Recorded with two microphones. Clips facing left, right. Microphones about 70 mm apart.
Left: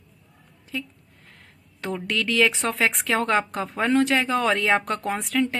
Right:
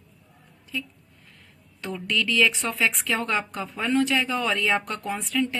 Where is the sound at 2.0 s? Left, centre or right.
Left.